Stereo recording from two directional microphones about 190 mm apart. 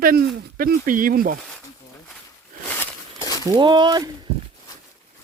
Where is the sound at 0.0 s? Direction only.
50° right (ahead or behind).